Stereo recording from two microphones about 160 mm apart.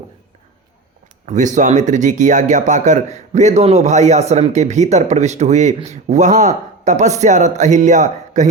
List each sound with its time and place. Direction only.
1.3 s speech: 50° right (ahead or behind)